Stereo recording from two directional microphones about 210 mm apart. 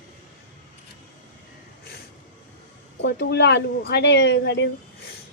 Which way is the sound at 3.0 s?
50° left (ahead or behind).